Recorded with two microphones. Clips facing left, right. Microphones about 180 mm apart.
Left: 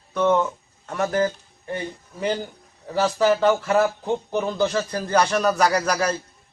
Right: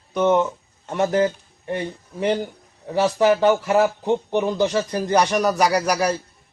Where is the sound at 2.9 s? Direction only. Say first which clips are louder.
Right 2 dB; 15° right (ahead or behind).